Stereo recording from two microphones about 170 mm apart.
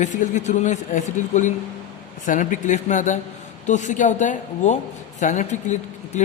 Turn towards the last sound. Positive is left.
turn(degrees=45)  # may be behind; listen again after turning